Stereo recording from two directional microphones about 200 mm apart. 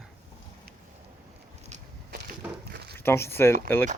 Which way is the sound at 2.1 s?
50° right (ahead or behind).